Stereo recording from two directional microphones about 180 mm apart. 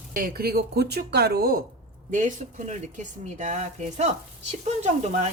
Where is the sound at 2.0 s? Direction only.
45° right (ahead or behind).